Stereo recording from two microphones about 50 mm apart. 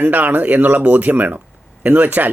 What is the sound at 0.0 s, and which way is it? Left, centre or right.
Speech, right.